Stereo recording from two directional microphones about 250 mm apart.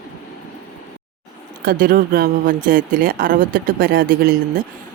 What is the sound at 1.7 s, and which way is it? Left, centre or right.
Speech, right.